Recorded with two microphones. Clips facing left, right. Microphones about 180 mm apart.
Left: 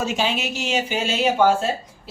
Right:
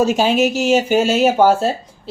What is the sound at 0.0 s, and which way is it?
Speech, 40° right (ahead or behind).